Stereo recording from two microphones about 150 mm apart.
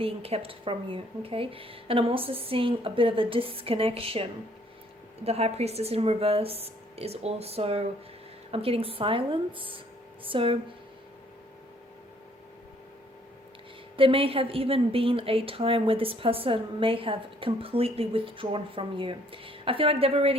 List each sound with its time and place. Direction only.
0.0 s a woman's voice: 40° right (ahead or behind)
13.9 s a woman's voice: 35° right (ahead or behind)